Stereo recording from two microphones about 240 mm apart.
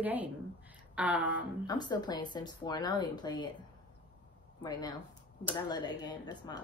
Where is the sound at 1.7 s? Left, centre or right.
Centre.